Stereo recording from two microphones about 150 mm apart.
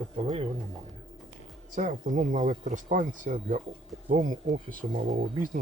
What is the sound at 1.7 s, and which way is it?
Speech, 60° right (ahead or behind).